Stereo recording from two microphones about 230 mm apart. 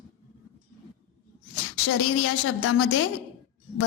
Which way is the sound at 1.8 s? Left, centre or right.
Left.